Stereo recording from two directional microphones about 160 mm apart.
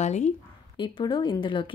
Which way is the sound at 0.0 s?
45° left (ahead or behind).